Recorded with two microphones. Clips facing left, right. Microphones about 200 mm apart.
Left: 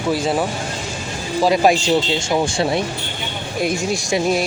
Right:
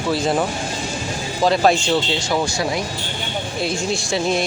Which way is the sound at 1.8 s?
25° left (ahead or behind).